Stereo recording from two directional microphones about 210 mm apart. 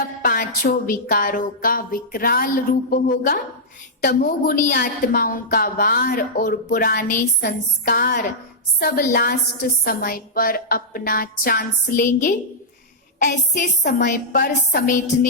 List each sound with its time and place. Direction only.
0.0 s a woman's voice: 45° left (ahead or behind)